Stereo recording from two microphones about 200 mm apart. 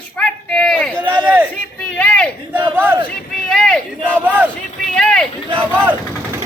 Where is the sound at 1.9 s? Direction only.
5° left (ahead or behind).